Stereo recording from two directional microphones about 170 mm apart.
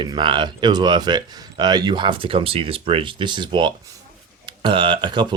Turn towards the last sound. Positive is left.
turn(degrees=-25)  # may be behind; listen again after turning